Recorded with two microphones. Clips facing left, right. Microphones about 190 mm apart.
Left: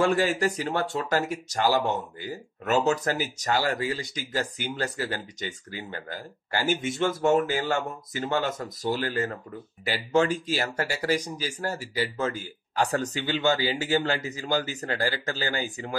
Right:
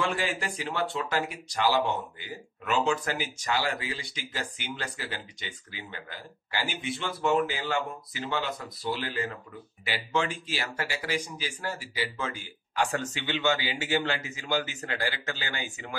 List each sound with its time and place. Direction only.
0.0 s speech: 40° left (ahead or behind)